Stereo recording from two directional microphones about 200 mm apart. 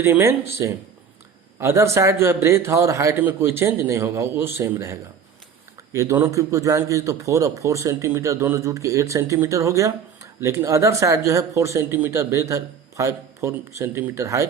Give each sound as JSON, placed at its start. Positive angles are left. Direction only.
{"t": 0.0, "sound": "speech", "side_deg": -10}